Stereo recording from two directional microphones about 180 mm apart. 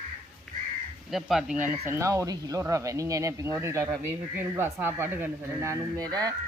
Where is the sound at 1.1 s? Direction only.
Centre (ahead or behind).